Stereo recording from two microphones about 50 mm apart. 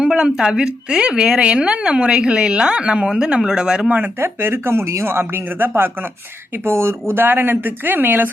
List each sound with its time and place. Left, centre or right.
0.0 s a woman's voice: centre
4.2 s speech: right
6.7 s speech: right
7.1 s speech: right